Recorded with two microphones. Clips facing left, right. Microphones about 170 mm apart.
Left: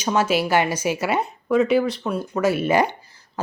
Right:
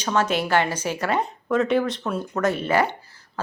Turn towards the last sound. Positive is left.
turn(degrees=15)  # may be behind; listen again after turning